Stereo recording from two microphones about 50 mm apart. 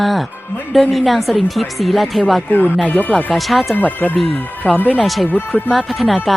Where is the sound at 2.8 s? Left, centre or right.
Left.